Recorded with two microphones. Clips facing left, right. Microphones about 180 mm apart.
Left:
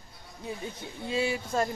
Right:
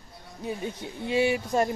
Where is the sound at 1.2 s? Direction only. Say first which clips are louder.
Right 4 dB; 15° right (ahead or behind).